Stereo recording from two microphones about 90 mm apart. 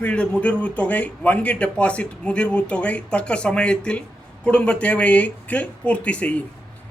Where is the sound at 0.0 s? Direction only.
15° left (ahead or behind).